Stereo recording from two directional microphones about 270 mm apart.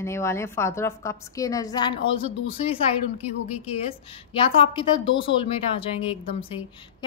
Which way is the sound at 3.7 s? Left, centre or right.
Left.